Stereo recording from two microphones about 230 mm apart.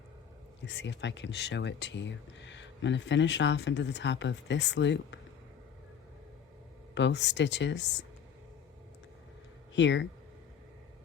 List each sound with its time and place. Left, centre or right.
0.6 s speech: left
6.9 s speech: left
9.7 s speech: left